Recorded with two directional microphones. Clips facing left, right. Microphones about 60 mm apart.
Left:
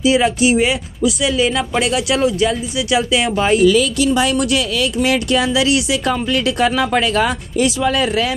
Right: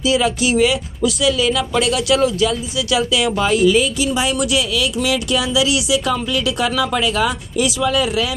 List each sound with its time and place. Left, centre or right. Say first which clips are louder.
0.0 s speech: left 3 dB; left
3.6 s speech: left 2 dB; left